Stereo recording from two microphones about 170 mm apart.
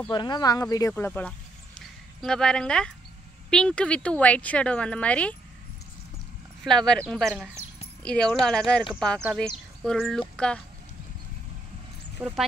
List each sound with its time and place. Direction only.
0.1 s speech: 25° left (ahead or behind)
1.8 s a sound: 5° left (ahead or behind)
3.4 s speech: 5° left (ahead or behind)
6.6 s speech: 5° left (ahead or behind)
9.8 s speech: centre (ahead or behind)
12.2 s speech: 10° right (ahead or behind)